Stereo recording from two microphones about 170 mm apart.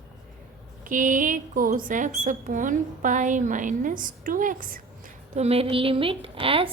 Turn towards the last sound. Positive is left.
turn(degrees=-30)  # may be behind; listen again after turning